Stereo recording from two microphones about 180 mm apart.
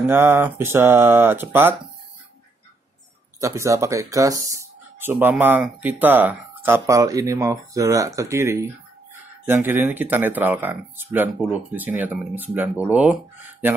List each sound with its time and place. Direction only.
0.1 s speech: 10° right (ahead or behind)
3.3 s speech: 15° right (ahead or behind)